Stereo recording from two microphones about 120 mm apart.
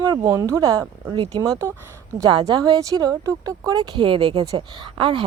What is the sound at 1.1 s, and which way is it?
Speech, 50° right (ahead or behind).